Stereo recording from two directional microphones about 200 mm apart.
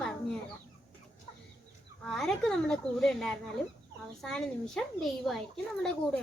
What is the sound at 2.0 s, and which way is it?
Speech, 5° left (ahead or behind).